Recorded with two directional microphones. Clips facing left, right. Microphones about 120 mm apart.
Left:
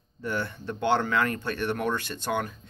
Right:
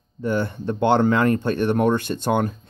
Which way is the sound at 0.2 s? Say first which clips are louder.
Right 8 dB; 25° right (ahead or behind).